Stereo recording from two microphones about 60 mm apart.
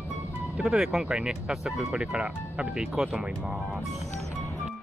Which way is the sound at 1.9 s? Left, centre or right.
Right.